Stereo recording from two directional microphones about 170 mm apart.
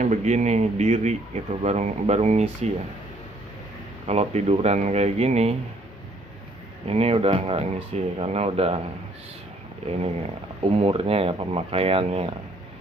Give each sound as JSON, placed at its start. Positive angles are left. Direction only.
{"t": 0.0, "sound": "speech", "side_deg": -45}
{"t": 4.1, "sound": "speech", "side_deg": -40}
{"t": 6.9, "sound": "speech", "side_deg": -35}
{"t": 9.8, "sound": "speech", "side_deg": -35}